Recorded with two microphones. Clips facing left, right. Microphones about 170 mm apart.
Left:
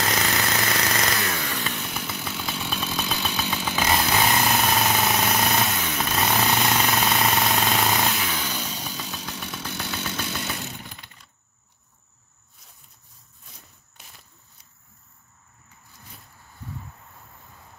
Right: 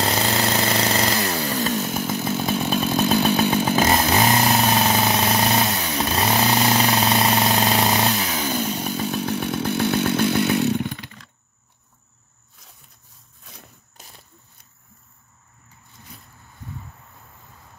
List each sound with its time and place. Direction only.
0.0 s chainsaw: 30° right (ahead or behind)
6.7 s vehicle: 35° right (ahead or behind); by 11.2 s 90° right